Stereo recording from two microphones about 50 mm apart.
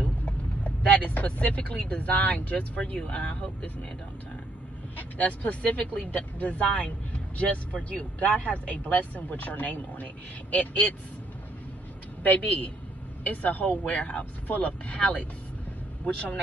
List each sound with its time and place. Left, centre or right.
0.0 s speech: left
5.1 s speech: left
12.2 s speech: left